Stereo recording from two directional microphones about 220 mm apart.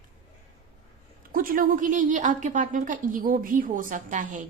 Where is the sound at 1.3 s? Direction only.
40° right (ahead or behind).